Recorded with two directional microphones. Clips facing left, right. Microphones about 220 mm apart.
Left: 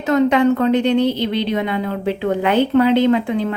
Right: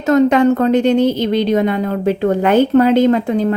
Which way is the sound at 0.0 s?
45° right (ahead or behind).